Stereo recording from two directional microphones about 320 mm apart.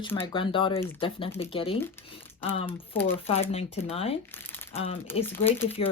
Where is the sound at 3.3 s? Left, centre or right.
Centre.